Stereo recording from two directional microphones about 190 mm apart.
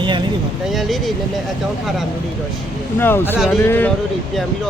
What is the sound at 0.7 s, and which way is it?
Speech, centre (ahead or behind).